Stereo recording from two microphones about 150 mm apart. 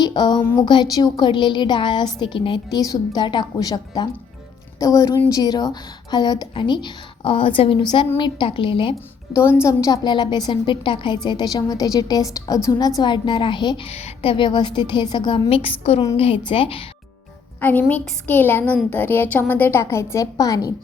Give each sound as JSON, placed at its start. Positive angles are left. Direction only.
{"t": 0.0, "sound": "a sound", "side_deg": 30}
{"t": 0.6, "sound": "a woman's voice", "side_deg": 30}
{"t": 9.6, "sound": "a woman's voice", "side_deg": 20}
{"t": 17.6, "sound": "a woman's voice", "side_deg": 10}